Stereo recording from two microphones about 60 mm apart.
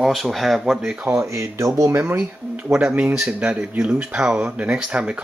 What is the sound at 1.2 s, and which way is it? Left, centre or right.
Speech, right.